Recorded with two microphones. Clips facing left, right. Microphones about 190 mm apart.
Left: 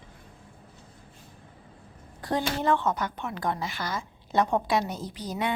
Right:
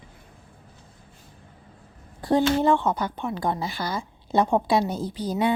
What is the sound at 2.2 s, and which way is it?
Speech, 30° right (ahead or behind).